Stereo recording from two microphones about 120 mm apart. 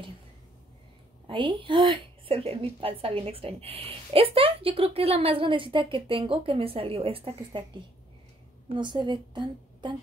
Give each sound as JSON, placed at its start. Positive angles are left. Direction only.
{"t": 1.2, "sound": "a woman's voice", "side_deg": -40}